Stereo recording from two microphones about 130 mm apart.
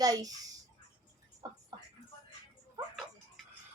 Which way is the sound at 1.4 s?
30° right (ahead or behind).